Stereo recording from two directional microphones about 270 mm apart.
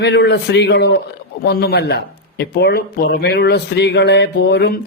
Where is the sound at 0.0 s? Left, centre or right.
Left.